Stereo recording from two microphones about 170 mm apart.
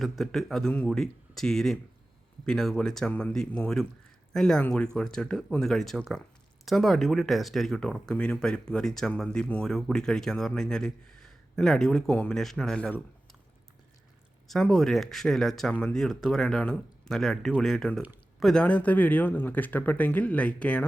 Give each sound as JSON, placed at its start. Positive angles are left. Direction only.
{"t": 0.0, "sound": "speech", "side_deg": 0}
{"t": 14.4, "sound": "speech", "side_deg": 5}